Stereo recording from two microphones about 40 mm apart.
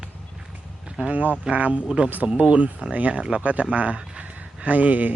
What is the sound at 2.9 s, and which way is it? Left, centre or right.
Speech, right.